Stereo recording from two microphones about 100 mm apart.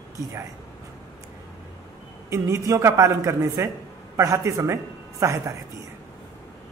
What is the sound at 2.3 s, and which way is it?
A man's voice, 30° right (ahead or behind).